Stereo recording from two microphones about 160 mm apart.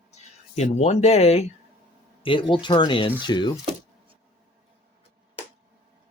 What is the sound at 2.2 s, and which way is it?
Speech, 30° left (ahead or behind).